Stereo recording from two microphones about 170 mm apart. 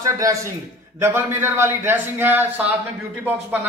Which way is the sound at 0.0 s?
20° right (ahead or behind).